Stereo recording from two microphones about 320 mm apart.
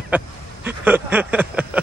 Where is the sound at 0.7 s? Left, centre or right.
Centre.